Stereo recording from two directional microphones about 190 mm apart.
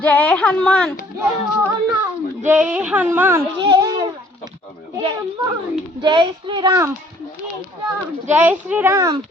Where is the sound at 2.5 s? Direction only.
5° right (ahead or behind).